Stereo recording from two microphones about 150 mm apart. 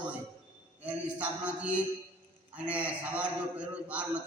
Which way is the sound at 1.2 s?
10° right (ahead or behind).